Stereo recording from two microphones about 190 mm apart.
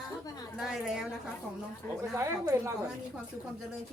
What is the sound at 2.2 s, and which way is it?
Speech, 15° right (ahead or behind).